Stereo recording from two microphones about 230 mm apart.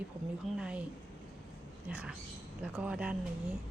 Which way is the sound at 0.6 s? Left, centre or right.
Centre.